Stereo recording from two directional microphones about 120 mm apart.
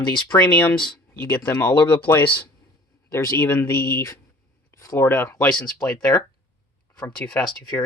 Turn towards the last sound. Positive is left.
turn(degrees=10)  # may be behind; listen again after turning